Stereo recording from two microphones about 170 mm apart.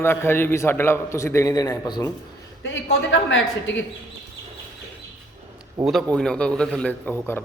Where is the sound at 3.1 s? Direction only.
90° left.